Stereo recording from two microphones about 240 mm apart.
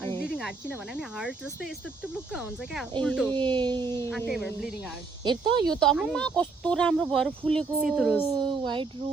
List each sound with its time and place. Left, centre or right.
0.3 s a sound: centre
3.0 s speech: centre
3.3 s speech: centre
3.8 s speech: centre
4.3 s speech: centre
5.2 s speech: centre
5.6 s speech: centre
8.3 s speech: centre